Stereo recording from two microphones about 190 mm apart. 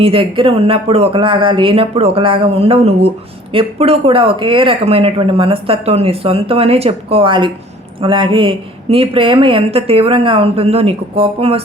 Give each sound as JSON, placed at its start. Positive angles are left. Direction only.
{"t": 0.0, "sound": "speech", "side_deg": -30}